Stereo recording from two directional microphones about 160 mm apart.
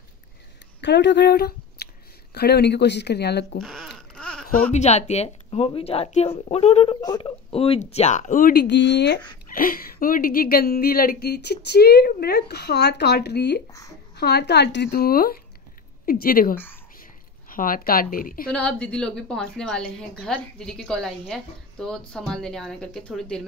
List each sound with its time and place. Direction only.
0.7 s speech: 90° left
3.5 s babbling: 5° left (ahead or behind)
4.7 s speech: 45° left (ahead or behind)
7.0 s speech: 25° left (ahead or behind); by 9.2 s 90° left
9.5 s a woman's voice: 60° left (ahead or behind)
18.5 s a woman's voice: 5° left (ahead or behind)